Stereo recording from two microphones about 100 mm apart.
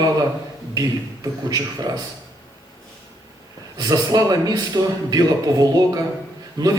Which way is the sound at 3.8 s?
40° right (ahead or behind).